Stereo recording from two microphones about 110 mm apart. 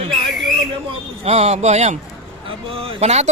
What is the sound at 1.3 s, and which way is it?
Speech, 80° right.